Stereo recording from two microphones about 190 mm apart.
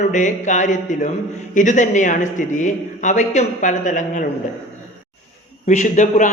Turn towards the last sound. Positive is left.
turn(degrees=40)  # may be behind; listen again after turning